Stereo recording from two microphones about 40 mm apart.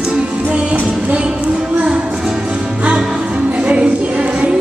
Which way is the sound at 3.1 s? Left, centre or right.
Right.